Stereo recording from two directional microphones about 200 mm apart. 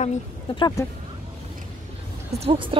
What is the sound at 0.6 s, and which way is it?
Speech, 20° left (ahead or behind).